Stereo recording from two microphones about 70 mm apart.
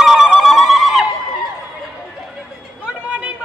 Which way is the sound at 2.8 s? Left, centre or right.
Centre.